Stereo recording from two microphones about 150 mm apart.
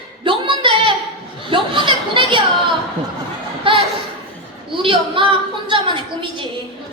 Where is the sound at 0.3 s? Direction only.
35° right (ahead or behind).